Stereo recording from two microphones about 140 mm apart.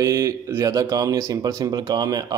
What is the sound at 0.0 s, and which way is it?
Speech, 25° right (ahead or behind).